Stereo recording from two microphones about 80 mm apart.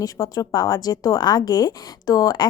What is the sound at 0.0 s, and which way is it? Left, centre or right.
A woman's voice, left.